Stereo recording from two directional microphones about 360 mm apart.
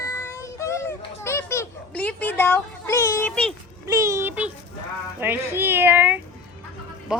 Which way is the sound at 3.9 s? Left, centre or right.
Centre.